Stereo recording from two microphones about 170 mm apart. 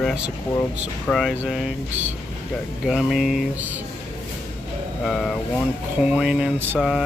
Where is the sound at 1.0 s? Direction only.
Centre (ahead or behind).